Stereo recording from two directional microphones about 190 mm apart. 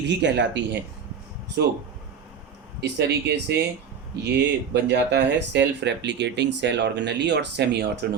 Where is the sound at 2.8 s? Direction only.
60° right (ahead or behind).